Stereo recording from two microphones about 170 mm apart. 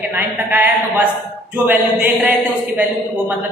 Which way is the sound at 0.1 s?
10° right (ahead or behind).